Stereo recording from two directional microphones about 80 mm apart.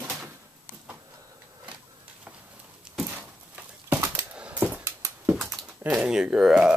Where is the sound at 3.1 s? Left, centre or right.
Centre.